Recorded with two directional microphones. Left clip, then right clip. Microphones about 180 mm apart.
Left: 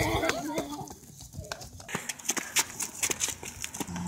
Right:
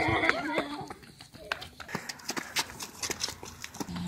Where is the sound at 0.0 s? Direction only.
55° left (ahead or behind).